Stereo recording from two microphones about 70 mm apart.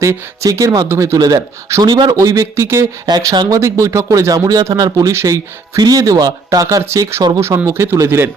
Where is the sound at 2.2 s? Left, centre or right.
Right.